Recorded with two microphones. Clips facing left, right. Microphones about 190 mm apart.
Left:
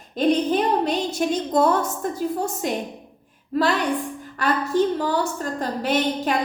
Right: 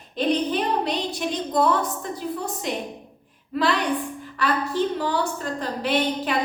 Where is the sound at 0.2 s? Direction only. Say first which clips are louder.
Left 3 dB; 45° left (ahead or behind).